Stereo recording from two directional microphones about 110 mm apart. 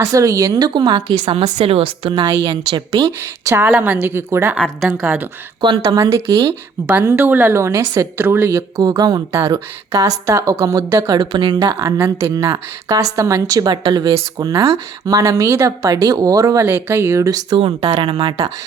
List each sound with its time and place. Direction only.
0.0 s speech: 30° right (ahead or behind)
1.5 s a woman's voice: 65° right (ahead or behind)
2.2 s speech: 35° right (ahead or behind)
3.5 s a woman's voice: 15° right (ahead or behind)
4.8 s a woman's voice: 5° right (ahead or behind)
5.6 s speech: 40° right (ahead or behind)
6.1 s a woman's voice: 25° right (ahead or behind)
11.9 s a woman's voice: 20° right (ahead or behind)
17.6 s a woman's voice: 60° right (ahead or behind)
17.9 s speech: 50° right (ahead or behind)